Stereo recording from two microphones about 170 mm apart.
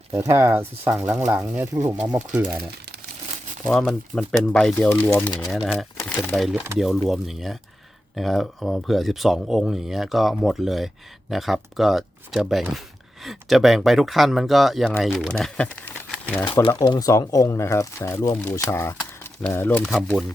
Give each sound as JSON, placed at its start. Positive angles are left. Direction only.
{"t": 0.1, "sound": "speech", "side_deg": -15}
{"t": 3.7, "sound": "speech", "side_deg": 5}
{"t": 4.9, "sound": "speech", "side_deg": 15}
{"t": 5.5, "sound": "speech", "side_deg": 0}
{"t": 16.6, "sound": "speech", "side_deg": 30}